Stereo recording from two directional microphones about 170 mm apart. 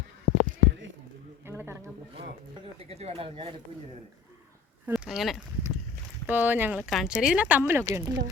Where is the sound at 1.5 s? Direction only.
15° right (ahead or behind).